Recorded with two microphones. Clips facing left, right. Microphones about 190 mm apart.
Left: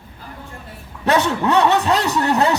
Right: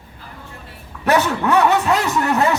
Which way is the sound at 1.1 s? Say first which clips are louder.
Even; 25° left (ahead or behind).